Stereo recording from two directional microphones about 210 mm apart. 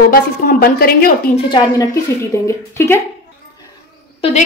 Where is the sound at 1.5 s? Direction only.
20° left (ahead or behind).